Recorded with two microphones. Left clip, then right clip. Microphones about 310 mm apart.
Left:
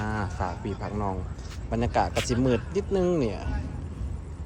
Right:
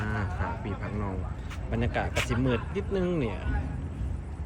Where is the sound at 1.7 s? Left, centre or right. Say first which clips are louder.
Left 5 dB; centre.